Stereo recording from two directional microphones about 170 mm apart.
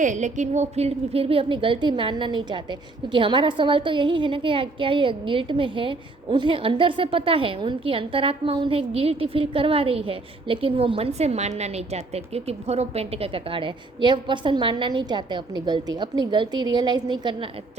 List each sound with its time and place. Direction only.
0.0 s a woman's voice: 45° right (ahead or behind); by 17.5 s 25° right (ahead or behind)